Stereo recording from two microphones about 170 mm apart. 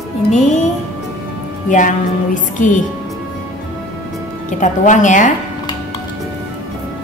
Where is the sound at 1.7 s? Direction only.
50° left (ahead or behind).